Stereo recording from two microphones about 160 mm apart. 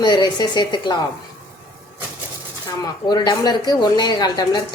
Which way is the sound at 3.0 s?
25° left (ahead or behind).